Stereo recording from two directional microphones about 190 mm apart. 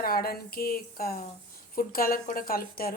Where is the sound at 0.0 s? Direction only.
50° left (ahead or behind).